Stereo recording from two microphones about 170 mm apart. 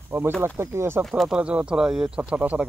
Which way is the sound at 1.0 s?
Centre (ahead or behind).